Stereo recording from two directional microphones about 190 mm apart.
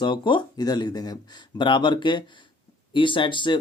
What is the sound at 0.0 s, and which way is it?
Speech, 25° left (ahead or behind).